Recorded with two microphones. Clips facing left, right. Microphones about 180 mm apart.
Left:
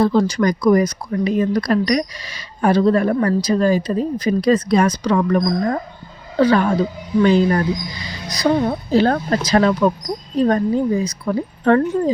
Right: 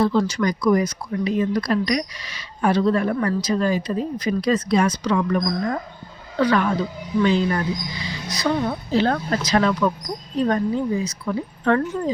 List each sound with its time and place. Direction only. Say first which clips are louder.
0.0 s speech: left 4 dB; 40° left (ahead or behind)